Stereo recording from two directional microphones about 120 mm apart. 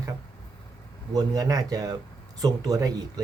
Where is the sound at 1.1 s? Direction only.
30° right (ahead or behind).